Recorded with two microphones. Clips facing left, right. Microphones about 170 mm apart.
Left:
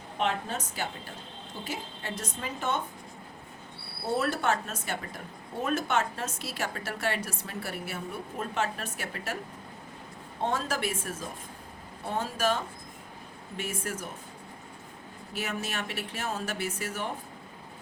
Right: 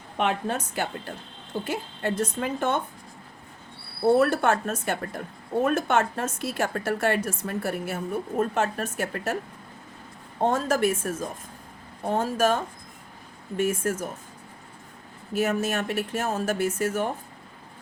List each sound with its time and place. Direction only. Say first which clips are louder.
0.2 s a woman's voice: right 5 dB; 55° right (ahead or behind)
4.2 s a woman's voice: right 7 dB; 55° right (ahead or behind)
10.4 s a woman's voice: right 8 dB; 45° right (ahead or behind)
13.6 s a woman's voice: right 10 dB; 45° right (ahead or behind)
15.4 s a woman's voice: right 9 dB; 45° right (ahead or behind)